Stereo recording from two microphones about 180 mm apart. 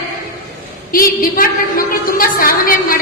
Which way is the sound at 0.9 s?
50° left (ahead or behind).